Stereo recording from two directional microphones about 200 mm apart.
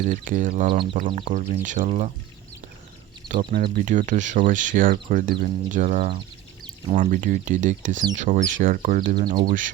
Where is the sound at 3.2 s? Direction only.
Centre (ahead or behind).